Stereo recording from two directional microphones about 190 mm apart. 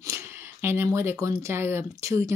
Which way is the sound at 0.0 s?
15° right (ahead or behind).